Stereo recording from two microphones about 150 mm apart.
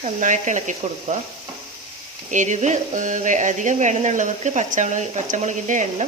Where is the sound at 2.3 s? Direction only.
55° right (ahead or behind).